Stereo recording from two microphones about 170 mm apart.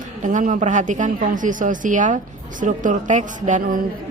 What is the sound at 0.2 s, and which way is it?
Speech, 50° right (ahead or behind).